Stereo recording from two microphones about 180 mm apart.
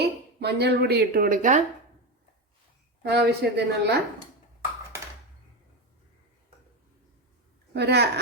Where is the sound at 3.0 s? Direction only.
65° right (ahead or behind).